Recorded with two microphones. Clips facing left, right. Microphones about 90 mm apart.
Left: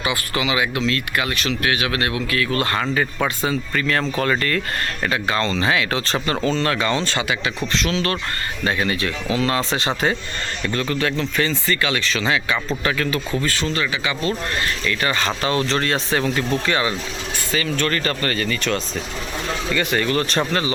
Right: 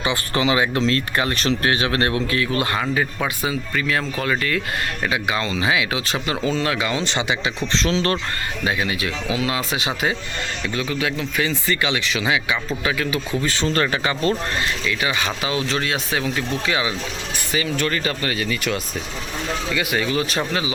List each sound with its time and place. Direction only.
0.0 s speech: 30° right (ahead or behind)
2.7 s speech: 10° right (ahead or behind)
7.1 s speech: 20° right (ahead or behind)
8.6 s speech: 10° right (ahead or behind)
13.7 s speech: 40° right (ahead or behind)
14.8 s speech: 5° right (ahead or behind)